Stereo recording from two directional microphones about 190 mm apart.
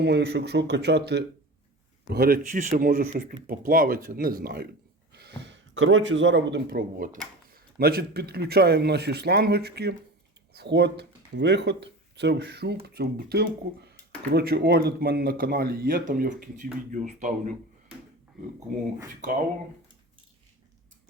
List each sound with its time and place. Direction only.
0.0 s speech: 60° right (ahead or behind)
5.1 s a sound: 60° right (ahead or behind)
6.7 s speech: 50° right (ahead or behind)